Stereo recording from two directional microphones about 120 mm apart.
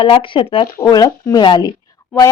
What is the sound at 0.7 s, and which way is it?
Speech, 30° left (ahead or behind).